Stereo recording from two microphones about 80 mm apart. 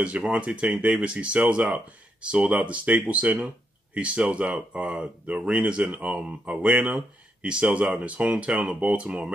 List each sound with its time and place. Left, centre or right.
0.0 s speech: centre